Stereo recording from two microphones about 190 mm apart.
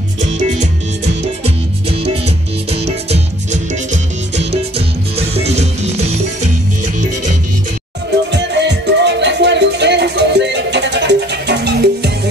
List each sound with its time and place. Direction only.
0.2 s music: 40° right (ahead or behind)
4.7 s music: 30° right (ahead or behind)
8.3 s music: 65° right (ahead or behind)